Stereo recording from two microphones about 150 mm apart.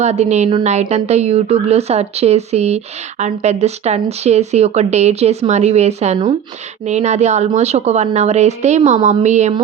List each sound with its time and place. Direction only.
0.0 s speech: 45° right (ahead or behind)